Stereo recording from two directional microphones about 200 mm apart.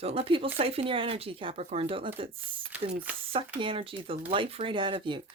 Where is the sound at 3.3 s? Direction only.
25° right (ahead or behind).